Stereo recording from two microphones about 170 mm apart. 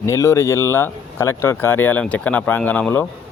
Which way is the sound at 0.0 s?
15° left (ahead or behind).